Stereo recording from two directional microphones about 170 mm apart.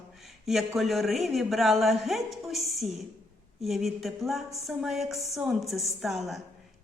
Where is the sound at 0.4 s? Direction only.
Centre (ahead or behind).